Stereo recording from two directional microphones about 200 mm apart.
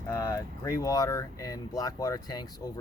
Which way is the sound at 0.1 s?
15° left (ahead or behind).